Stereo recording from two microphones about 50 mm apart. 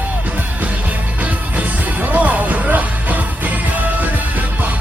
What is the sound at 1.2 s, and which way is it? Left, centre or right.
Music, right.